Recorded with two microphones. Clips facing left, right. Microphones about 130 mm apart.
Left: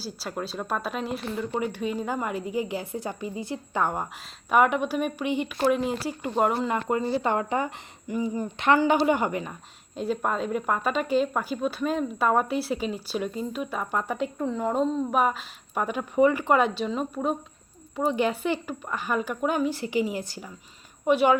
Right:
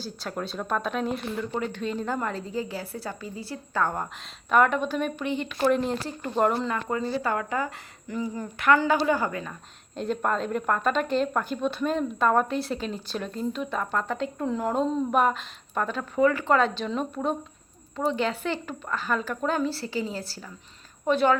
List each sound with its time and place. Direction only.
0.0 s speech: 5° left (ahead or behind)
6.7 s speech: 20° left (ahead or behind)
14.4 s speech: centre (ahead or behind)